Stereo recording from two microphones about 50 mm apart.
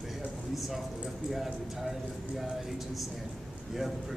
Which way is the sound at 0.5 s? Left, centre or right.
Centre.